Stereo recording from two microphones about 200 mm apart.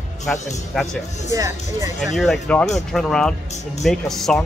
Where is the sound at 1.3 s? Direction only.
15° right (ahead or behind).